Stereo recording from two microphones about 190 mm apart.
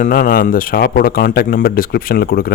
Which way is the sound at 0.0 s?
45° left (ahead or behind).